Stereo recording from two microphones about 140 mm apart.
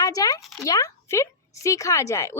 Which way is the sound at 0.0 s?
25° left (ahead or behind).